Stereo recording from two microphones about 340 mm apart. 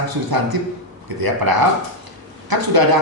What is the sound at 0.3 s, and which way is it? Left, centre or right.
Speech, right.